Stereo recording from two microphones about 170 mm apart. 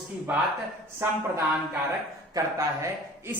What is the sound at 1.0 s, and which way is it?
Speech, 15° right (ahead or behind).